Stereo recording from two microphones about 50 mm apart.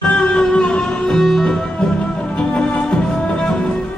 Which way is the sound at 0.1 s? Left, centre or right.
Left.